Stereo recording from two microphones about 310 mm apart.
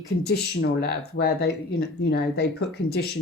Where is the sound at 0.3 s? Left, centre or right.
Left.